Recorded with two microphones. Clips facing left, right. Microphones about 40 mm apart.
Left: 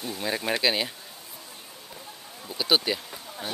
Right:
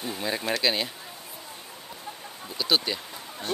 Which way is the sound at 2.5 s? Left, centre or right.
Centre.